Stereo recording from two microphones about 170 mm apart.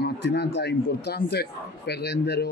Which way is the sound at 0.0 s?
90° left.